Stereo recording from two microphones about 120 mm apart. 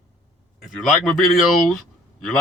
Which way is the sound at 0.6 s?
Centre (ahead or behind).